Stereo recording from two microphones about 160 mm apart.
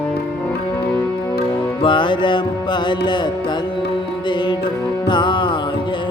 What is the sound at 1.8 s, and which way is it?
Music, 30° left (ahead or behind).